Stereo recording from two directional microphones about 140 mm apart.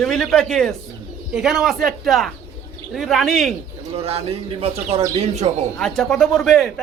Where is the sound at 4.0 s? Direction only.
45° right (ahead or behind).